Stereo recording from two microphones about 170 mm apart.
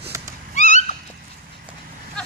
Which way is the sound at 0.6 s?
45° left (ahead or behind).